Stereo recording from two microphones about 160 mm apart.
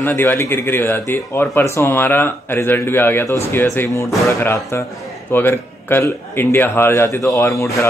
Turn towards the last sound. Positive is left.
turn(degrees=15)  # may be behind; listen again after turning